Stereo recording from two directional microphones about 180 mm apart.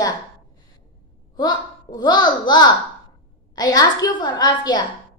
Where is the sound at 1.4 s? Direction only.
25° left (ahead or behind).